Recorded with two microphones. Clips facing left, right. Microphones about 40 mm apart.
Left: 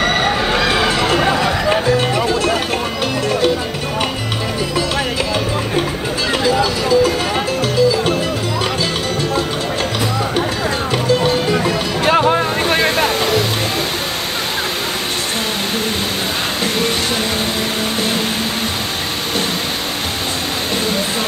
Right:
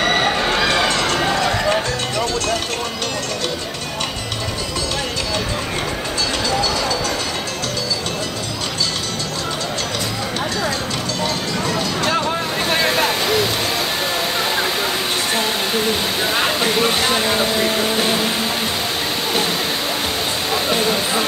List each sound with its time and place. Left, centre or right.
0.0 s run: centre
6.4 s run: centre
11.1 s music: left
12.7 s waterfall: centre